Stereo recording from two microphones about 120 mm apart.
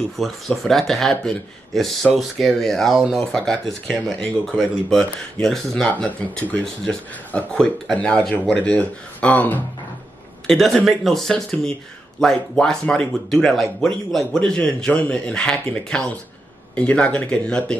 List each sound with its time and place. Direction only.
0.2 s speech: centre (ahead or behind)